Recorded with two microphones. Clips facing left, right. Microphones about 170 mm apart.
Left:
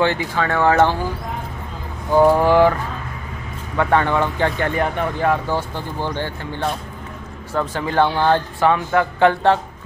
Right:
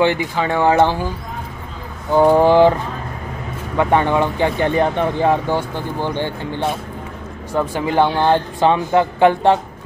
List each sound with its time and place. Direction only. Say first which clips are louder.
0.0 s speech: right 2 dB; 15° right (ahead or behind)
2.1 s speech: right 2 dB; 20° right (ahead or behind)
7.5 s speech: right 2 dB; 15° right (ahead or behind)